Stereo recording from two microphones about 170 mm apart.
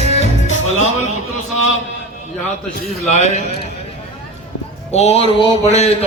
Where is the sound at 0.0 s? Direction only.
40° left (ahead or behind).